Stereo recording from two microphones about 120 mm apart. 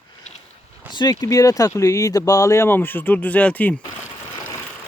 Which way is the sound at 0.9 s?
30° left (ahead or behind).